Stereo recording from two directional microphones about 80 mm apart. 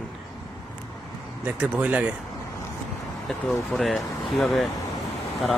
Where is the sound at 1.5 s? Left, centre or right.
Centre.